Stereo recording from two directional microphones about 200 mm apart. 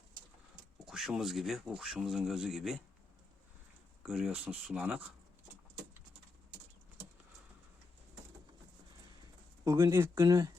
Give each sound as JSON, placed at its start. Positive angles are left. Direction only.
{"t": 0.9, "sound": "speech", "side_deg": 0}
{"t": 4.0, "sound": "speech", "side_deg": -5}
{"t": 9.6, "sound": "speech", "side_deg": -15}